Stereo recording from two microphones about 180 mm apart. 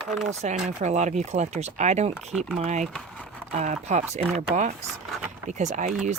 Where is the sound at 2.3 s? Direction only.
Centre (ahead or behind).